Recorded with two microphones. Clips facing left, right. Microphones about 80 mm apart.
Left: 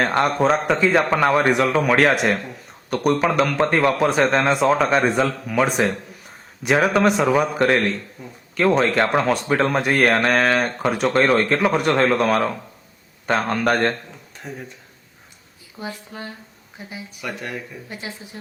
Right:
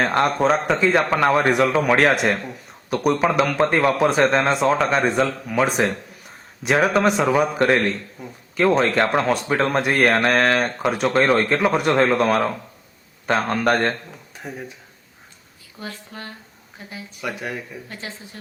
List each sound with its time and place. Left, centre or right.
0.0 s speech: centre
15.8 s speech: centre
17.2 s speech: centre
17.8 s speech: centre